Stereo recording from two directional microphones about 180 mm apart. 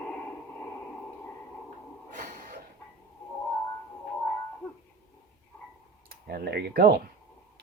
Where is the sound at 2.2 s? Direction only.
45° right (ahead or behind).